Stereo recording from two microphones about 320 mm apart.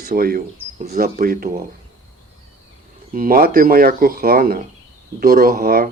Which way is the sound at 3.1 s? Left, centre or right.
Right.